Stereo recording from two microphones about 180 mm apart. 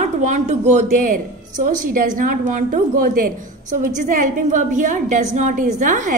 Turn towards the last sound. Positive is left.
turn(degrees=-45)  # may be behind; listen again after turning